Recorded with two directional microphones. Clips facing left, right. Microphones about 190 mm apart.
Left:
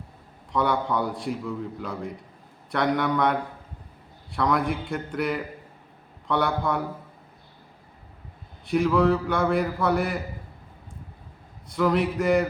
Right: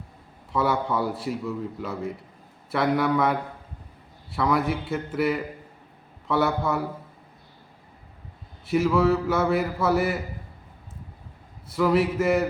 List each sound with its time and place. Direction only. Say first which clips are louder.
0.5 s a man's voice: even; 5° right (ahead or behind)
8.6 s a man's voice: even; 5° right (ahead or behind)
11.7 s a man's voice: right 1 dB; 5° right (ahead or behind)